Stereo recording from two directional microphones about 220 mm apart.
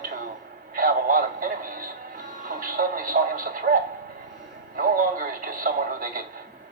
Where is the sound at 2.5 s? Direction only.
40° right (ahead or behind).